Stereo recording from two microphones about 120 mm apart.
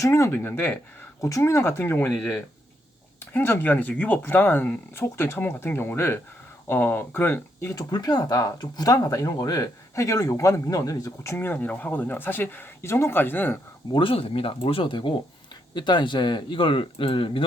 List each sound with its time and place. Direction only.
0.0 s speech: 25° left (ahead or behind)
1.2 s speech: 25° left (ahead or behind)
3.2 s speech: 20° left (ahead or behind)
13.9 s speech: 50° left (ahead or behind)